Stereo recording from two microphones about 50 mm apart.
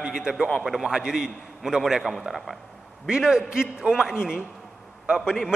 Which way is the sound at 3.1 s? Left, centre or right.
Centre.